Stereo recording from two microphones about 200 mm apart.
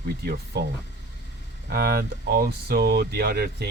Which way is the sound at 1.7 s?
50° right (ahead or behind).